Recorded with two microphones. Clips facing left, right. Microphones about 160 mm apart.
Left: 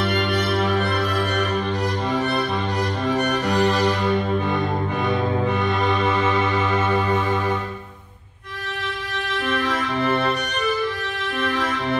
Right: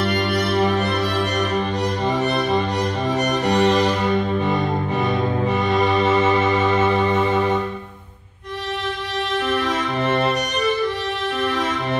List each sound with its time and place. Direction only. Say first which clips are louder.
3.5 s music: right 4 dB; 25° right (ahead or behind)
5.8 s music: right 4 dB; 20° right (ahead or behind)
10.0 s music: right 2 dB; 20° right (ahead or behind)